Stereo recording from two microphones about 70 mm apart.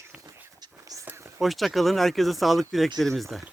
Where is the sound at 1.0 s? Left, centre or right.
Right.